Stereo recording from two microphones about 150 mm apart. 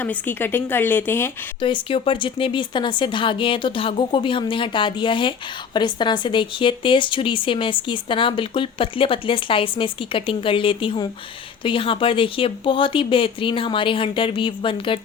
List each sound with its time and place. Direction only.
0.0 s speech: 10° left (ahead or behind)
1.6 s a woman's voice: 35° left (ahead or behind)